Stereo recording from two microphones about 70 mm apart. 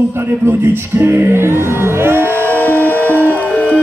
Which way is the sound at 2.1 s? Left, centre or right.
Left.